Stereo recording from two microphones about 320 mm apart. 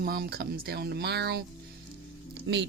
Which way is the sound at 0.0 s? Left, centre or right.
Right.